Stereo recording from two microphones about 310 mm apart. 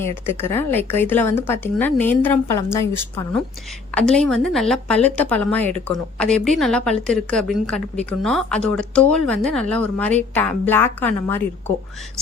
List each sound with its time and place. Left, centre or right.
0.0 s speech: centre
3.9 s a woman's voice: centre